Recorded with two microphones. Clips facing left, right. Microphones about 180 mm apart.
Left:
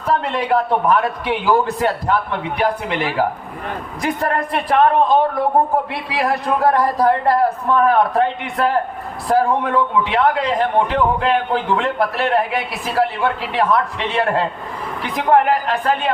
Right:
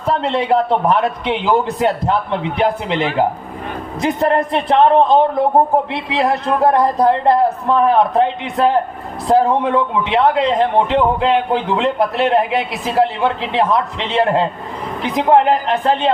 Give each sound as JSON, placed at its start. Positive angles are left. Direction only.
{"t": 0.0, "sound": "a man's voice", "side_deg": -25}